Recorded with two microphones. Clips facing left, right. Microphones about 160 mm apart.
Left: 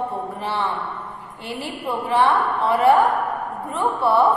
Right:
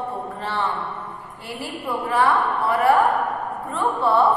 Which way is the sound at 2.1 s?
20° left (ahead or behind).